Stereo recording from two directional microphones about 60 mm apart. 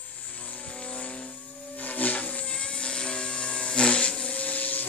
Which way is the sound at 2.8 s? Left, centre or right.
Centre.